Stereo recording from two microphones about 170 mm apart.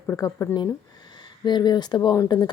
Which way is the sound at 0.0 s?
15° left (ahead or behind).